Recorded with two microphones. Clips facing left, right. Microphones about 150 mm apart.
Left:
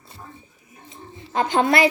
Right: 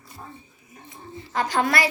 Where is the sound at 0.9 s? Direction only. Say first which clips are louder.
Even; 25° left (ahead or behind).